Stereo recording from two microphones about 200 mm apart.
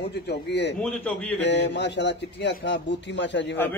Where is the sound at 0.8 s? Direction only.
5° left (ahead or behind).